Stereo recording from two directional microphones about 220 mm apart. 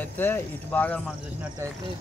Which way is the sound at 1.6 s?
15° right (ahead or behind).